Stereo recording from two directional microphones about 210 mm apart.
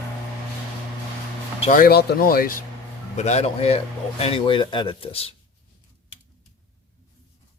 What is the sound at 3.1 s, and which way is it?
A man's voice, 30° left (ahead or behind).